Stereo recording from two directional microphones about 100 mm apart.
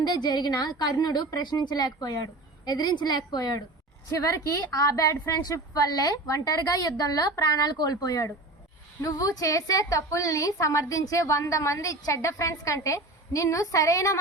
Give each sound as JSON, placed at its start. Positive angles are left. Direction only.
{"t": 0.0, "sound": "a woman's voice", "side_deg": 45}